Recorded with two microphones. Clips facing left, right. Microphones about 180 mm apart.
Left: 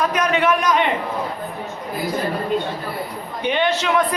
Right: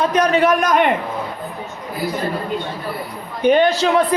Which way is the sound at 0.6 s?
50° right (ahead or behind).